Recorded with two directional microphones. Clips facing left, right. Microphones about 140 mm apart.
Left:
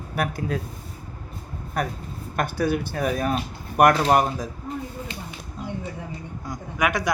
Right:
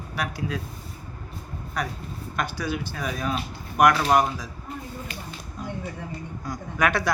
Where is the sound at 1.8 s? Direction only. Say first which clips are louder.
Left 3 dB; 50° left (ahead or behind).